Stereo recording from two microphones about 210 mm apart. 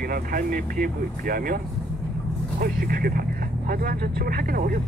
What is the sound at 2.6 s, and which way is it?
Speech, 45° right (ahead or behind).